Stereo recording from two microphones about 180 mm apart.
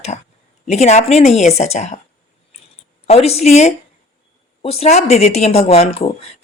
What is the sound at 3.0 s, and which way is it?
Speech, 35° left (ahead or behind).